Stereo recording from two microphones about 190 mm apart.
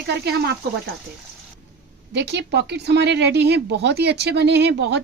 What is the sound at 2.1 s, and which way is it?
Speech, 65° right (ahead or behind).